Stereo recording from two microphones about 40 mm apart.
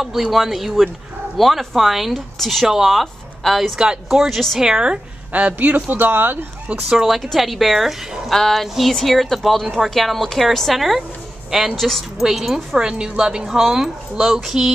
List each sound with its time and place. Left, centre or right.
0.0 s speech: centre
3.7 s a woman's voice: right
4.1 s a woman's voice: centre
5.3 s speech: right
6.9 s speech: centre
8.3 s a sound: centre
8.7 s speech: centre
11.7 s a sound: centre
12.2 s speech: centre
12.7 s a woman's voice: right
13.5 s speech: centre